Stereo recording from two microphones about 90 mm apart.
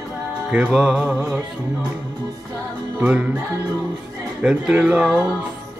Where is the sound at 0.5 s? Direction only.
10° right (ahead or behind).